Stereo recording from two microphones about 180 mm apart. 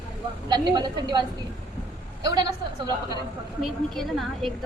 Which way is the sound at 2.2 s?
20° right (ahead or behind).